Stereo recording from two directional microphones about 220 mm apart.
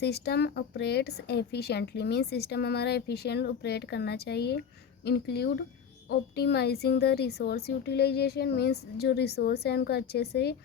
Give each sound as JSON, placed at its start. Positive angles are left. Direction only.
{"t": 0.0, "sound": "speech", "side_deg": 50}